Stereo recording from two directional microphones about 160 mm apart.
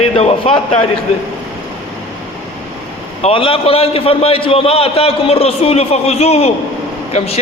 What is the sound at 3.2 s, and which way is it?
A man's voice, 35° left (ahead or behind).